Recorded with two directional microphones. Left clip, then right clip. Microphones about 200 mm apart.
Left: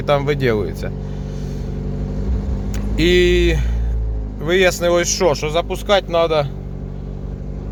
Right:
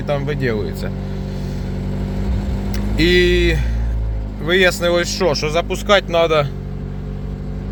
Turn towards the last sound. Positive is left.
turn(degrees=-10)  # may be behind; listen again after turning